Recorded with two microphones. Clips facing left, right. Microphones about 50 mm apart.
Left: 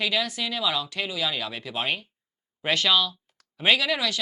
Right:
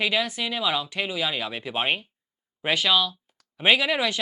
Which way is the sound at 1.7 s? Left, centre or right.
Right.